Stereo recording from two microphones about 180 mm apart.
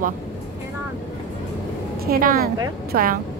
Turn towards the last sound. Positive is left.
turn(degrees=-50)  # may be behind; listen again after turning